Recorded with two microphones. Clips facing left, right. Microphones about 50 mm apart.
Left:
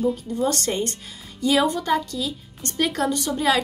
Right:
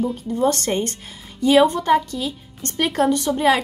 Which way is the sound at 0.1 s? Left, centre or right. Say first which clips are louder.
Right 4 dB; right.